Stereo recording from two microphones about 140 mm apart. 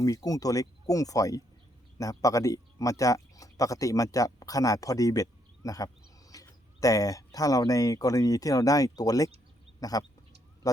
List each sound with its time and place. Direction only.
0.0 s speech: 25° left (ahead or behind)